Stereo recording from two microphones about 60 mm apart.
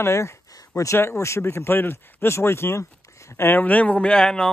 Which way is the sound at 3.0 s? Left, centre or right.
Left.